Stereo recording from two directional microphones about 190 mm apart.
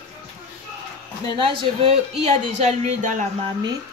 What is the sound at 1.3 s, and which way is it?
Speech, 25° right (ahead or behind).